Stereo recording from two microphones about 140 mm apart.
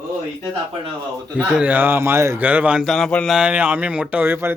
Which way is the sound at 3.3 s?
10° right (ahead or behind).